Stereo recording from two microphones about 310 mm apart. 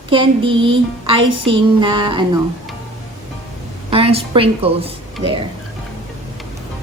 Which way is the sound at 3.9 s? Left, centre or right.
Centre.